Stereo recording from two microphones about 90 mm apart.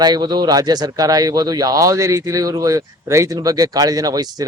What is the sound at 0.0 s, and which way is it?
Speech, 55° right (ahead or behind).